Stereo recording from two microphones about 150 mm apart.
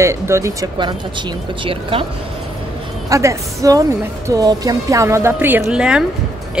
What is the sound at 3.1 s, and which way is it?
A woman's voice, 20° right (ahead or behind).